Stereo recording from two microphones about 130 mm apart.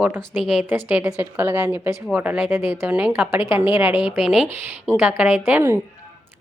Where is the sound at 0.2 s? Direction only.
5° right (ahead or behind).